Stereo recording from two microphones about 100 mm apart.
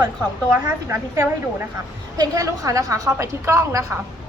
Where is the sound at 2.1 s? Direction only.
40° right (ahead or behind).